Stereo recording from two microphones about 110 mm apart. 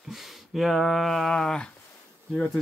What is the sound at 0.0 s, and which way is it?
Speech, centre (ahead or behind).